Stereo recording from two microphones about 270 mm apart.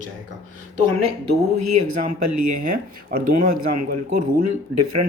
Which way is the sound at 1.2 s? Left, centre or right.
Right.